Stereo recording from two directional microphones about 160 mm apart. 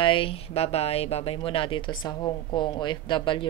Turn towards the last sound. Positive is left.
turn(degrees=30)  # may be behind; listen again after turning